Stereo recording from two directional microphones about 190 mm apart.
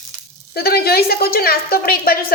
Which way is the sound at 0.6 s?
55° left (ahead or behind).